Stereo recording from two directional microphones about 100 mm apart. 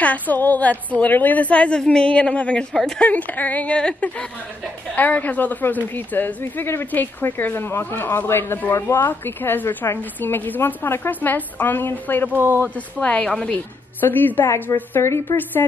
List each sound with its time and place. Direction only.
0.0 s a woman's voice: 15° left (ahead or behind)
12.3 s speech: 20° right (ahead or behind)
12.6 s a woman's voice: 10° left (ahead or behind)
14.0 s a woman's voice: 20° left (ahead or behind)